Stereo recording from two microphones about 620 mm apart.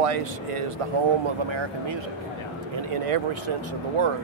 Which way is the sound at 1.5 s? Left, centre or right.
Right.